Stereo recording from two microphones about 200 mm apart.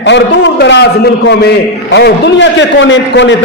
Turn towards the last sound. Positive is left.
turn(degrees=65)  # may be behind; listen again after turning